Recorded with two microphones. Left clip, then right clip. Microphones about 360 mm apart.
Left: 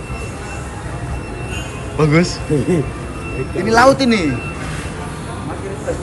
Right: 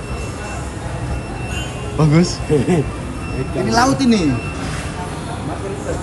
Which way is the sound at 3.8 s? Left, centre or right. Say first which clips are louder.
Left 4 dB; centre.